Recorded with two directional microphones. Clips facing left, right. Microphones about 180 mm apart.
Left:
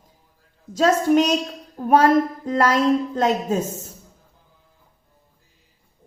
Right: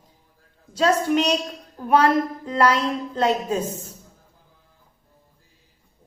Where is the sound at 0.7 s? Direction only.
45° left (ahead or behind).